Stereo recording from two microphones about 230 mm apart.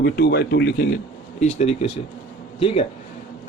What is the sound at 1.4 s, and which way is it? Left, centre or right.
A man's voice, left.